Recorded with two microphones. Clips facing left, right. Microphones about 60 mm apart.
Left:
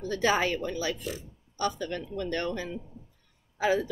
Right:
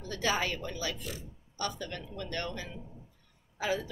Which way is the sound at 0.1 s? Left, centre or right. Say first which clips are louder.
Left 5 dB; left.